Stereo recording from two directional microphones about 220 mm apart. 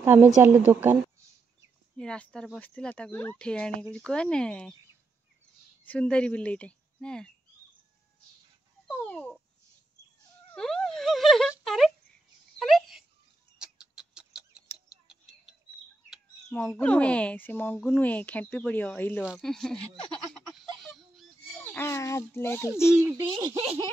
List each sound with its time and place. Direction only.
0.0 s a woman's voice: 10° right (ahead or behind)
2.0 s speech: 5° left (ahead or behind)
5.9 s a woman's voice: 5° left (ahead or behind)
8.8 s a sound: 10° left (ahead or behind)
10.5 s a sound: centre (ahead or behind)
13.6 s chicken: 5° right (ahead or behind)
16.1 s speech: centre (ahead or behind)
20.3 s a sound: 5° left (ahead or behind)
21.7 s speech: 10° left (ahead or behind)
22.9 s speech: 10° right (ahead or behind)